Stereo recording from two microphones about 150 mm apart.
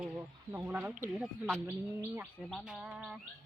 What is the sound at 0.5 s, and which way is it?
Speech, 10° right (ahead or behind).